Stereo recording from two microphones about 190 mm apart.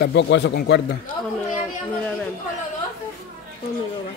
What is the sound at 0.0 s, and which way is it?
Speech, 65° left (ahead or behind).